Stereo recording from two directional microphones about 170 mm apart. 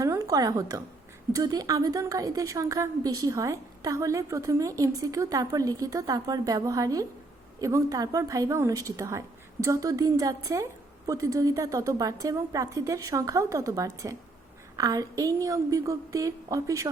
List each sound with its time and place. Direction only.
0.0 s a woman's voice: 20° right (ahead or behind)